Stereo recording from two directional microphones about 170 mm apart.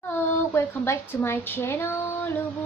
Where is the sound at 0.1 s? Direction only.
15° left (ahead or behind).